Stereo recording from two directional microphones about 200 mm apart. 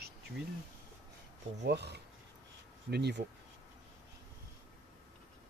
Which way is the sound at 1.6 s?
55° right (ahead or behind).